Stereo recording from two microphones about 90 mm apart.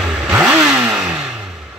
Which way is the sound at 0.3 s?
15° right (ahead or behind).